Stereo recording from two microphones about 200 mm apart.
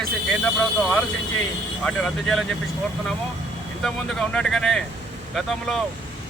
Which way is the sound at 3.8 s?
Centre (ahead or behind).